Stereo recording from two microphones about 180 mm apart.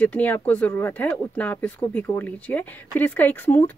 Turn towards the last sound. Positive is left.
turn(degrees=10)  # may be behind; listen again after turning